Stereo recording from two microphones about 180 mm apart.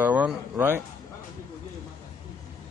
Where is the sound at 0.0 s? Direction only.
10° right (ahead or behind).